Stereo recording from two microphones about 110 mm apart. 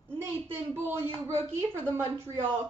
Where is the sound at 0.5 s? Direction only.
20° right (ahead or behind).